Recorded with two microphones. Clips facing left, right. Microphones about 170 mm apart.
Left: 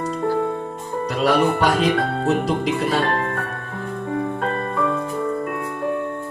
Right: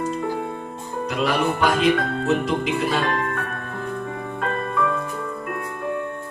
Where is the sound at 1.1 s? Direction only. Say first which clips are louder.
Left 4 dB; 35° left (ahead or behind).